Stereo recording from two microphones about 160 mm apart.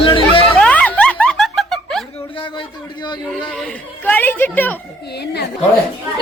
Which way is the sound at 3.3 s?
5° left (ahead or behind).